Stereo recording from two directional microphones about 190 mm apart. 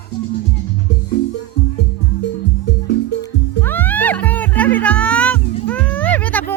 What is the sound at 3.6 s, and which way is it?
Music, 10° left (ahead or behind).